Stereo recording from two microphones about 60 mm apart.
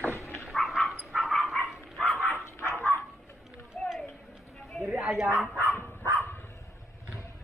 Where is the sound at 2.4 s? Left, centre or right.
Left.